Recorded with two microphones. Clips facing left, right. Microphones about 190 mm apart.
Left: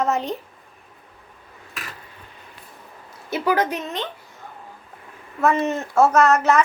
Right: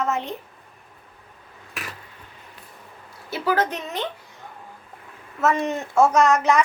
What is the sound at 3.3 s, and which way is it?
Speech, 15° left (ahead or behind).